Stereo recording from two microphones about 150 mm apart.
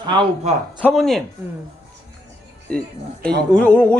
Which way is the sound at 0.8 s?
5° left (ahead or behind).